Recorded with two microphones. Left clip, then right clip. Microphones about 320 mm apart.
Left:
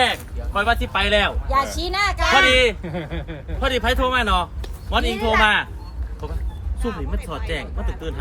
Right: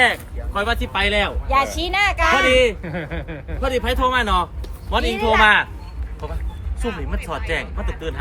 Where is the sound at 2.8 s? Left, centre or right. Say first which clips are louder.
Right 2 dB; right.